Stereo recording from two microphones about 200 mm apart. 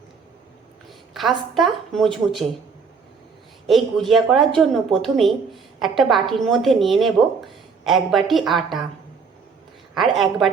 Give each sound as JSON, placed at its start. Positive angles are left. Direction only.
{"t": 1.1, "sound": "a woman's voice", "side_deg": 0}
{"t": 3.7, "sound": "a woman's voice", "side_deg": 0}
{"t": 10.0, "sound": "a woman's voice", "side_deg": 0}